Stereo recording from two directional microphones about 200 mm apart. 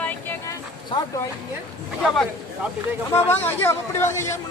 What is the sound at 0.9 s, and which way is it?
Speech, 25° left (ahead or behind).